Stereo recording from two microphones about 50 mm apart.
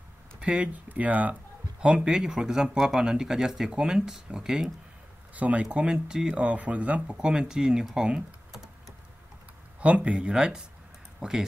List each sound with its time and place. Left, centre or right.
0.4 s speech: right
1.8 s speech: centre
2.8 s speech: centre
5.3 s speech: right
7.2 s speech: centre
9.8 s speech: right
10.3 s speech: centre